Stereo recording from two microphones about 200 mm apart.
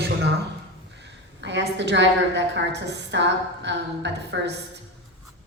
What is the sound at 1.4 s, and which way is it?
A woman's voice, 60° right (ahead or behind).